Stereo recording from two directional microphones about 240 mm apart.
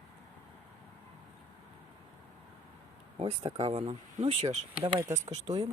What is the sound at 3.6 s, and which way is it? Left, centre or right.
Speech, right.